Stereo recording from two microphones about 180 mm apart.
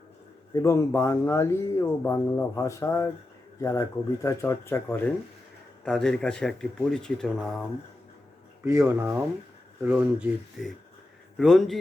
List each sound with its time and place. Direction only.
0.5 s speech: 15° left (ahead or behind)
5.8 s speech: 5° left (ahead or behind)
8.6 s speech: 15° right (ahead or behind); by 11.8 s centre (ahead or behind)